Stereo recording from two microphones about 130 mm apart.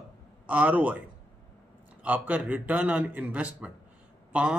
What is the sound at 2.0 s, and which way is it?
Speech, 10° right (ahead or behind).